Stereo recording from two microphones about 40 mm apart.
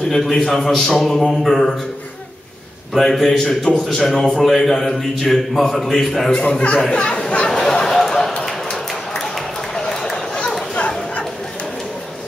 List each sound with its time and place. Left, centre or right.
0.1 s a man's voice: centre
3.0 s a man's voice: centre
6.3 s a man's voice: centre
7.6 s a sound: centre
9.8 s run: centre
10.8 s bow-wow: left